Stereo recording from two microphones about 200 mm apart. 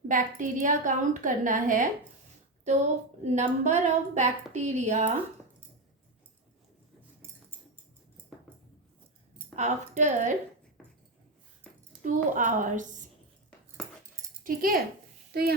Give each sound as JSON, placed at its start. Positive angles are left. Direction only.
{"t": 0.1, "sound": "a woman's voice", "side_deg": -40}
{"t": 3.2, "sound": "a woman's voice", "side_deg": -35}
{"t": 9.6, "sound": "a woman's voice", "side_deg": -35}
{"t": 12.0, "sound": "a woman's voice", "side_deg": -40}
{"t": 14.4, "sound": "a child's voice", "side_deg": -45}